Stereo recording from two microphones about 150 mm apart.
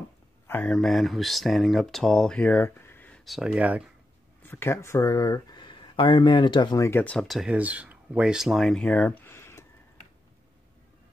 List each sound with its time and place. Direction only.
0.5 s speech: 10° left (ahead or behind)
3.3 s speech: 5° right (ahead or behind)
4.4 s speech: 15° left (ahead or behind)
6.9 s speech: 10° left (ahead or behind)